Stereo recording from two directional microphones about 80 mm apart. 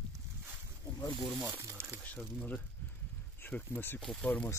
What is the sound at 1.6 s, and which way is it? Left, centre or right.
Crumpling, right.